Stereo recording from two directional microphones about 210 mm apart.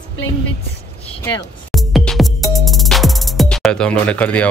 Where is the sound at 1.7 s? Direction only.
Centre (ahead or behind).